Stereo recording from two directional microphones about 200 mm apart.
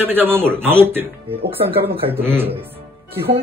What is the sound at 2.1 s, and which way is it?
Speech, 10° right (ahead or behind).